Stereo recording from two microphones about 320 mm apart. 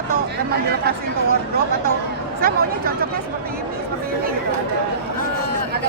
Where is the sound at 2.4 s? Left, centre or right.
Right.